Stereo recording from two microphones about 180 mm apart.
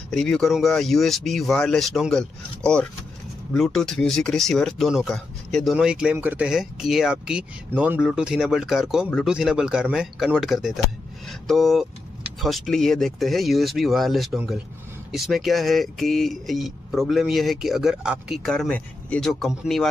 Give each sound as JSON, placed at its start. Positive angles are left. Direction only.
{"t": 0.1, "sound": "speech", "side_deg": 0}